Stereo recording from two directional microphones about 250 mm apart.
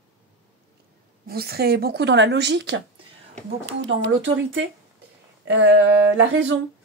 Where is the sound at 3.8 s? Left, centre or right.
Right.